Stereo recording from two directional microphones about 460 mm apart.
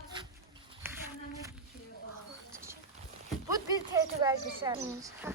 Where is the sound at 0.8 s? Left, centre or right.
Centre.